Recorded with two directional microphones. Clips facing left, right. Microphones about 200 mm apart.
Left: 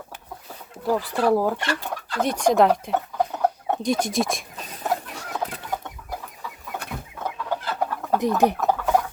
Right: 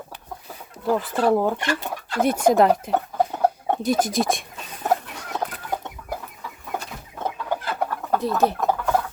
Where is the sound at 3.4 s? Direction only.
30° right (ahead or behind).